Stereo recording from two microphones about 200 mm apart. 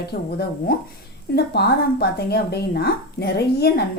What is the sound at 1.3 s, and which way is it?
Speech, 50° left (ahead or behind).